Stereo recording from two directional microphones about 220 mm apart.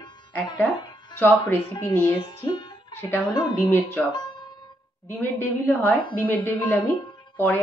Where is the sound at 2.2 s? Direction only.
20° left (ahead or behind).